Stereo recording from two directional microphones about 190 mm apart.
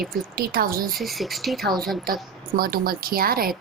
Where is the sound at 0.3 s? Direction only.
50° right (ahead or behind).